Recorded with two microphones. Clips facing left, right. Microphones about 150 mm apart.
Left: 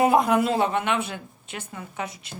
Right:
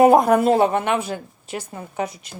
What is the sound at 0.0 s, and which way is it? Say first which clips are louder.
A woman's voice: right 6 dB; 45° right (ahead or behind).